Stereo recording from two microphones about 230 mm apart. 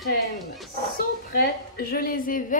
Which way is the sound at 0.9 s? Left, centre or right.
Left.